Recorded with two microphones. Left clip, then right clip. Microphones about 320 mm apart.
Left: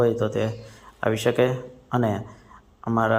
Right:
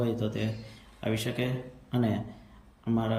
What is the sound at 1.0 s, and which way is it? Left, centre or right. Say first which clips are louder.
A man's voice: left 11 dB; left.